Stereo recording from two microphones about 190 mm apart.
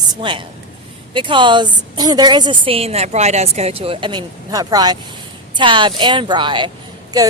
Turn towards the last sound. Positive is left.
turn(degrees=-20)  # may be behind; listen again after turning